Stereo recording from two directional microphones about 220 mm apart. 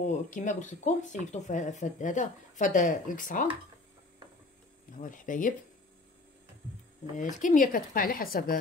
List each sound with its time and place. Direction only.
0.0 s speech: 35° left (ahead or behind)
4.9 s speech: 35° left (ahead or behind)
7.2 s speech: 35° left (ahead or behind)